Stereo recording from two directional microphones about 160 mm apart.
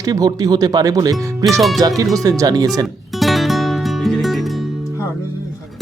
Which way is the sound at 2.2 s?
25° right (ahead or behind).